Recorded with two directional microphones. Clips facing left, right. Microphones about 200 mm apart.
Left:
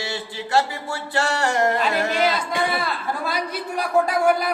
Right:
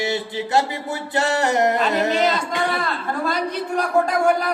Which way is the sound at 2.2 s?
10° left (ahead or behind).